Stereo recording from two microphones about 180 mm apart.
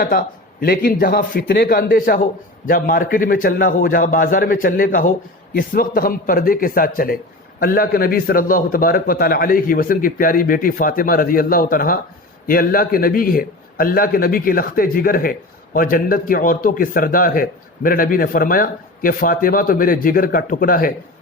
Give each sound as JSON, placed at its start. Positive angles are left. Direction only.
{"t": 0.0, "sound": "a man's voice", "side_deg": 55}